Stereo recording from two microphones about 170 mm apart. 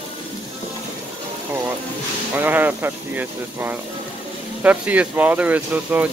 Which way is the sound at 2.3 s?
10° right (ahead or behind).